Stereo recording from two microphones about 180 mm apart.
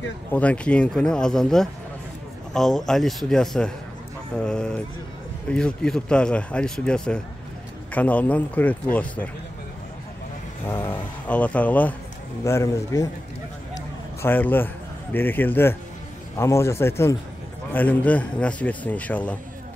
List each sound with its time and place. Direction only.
0.3 s a man's voice: 10° left (ahead or behind)
10.6 s a man's voice: 10° left (ahead or behind)
13.7 s a sound: 10° left (ahead or behind)
15.1 s a man's voice: 10° left (ahead or behind)